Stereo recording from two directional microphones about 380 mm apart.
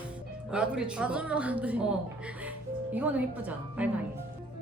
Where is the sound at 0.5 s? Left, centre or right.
Centre.